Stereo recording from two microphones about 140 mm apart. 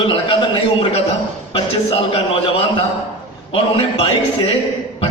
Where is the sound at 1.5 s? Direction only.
45° left (ahead or behind).